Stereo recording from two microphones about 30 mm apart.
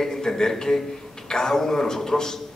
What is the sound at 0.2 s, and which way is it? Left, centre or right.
A man's voice, centre.